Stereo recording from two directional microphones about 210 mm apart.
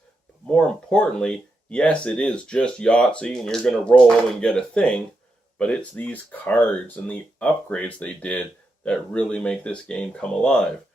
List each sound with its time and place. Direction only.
0.4 s speech: 5° left (ahead or behind)